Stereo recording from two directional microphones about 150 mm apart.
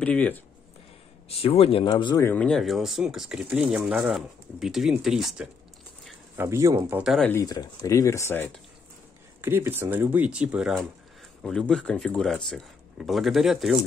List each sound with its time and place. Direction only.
0.0 s speech: 10° left (ahead or behind)
1.4 s speech: 40° left (ahead or behind)
2.1 s speech: 15° left (ahead or behind)
2.4 s speech: centre (ahead or behind)
6.3 s speech: 15° right (ahead or behind)
7.0 s speech: centre (ahead or behind)
7.4 s speech: 25° left (ahead or behind)
9.4 s speech: 15° right (ahead or behind)
11.4 s speech: 5° left (ahead or behind)